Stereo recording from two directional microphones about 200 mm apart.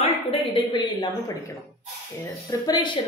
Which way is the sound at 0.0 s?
25° left (ahead or behind).